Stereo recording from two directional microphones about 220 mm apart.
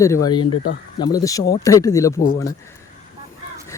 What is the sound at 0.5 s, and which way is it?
Speech, 75° left (ahead or behind).